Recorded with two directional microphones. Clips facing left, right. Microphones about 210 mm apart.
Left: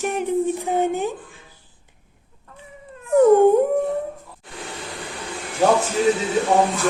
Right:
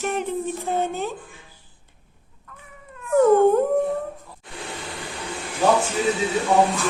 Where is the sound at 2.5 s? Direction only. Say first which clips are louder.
Left 3 dB; 30° left (ahead or behind).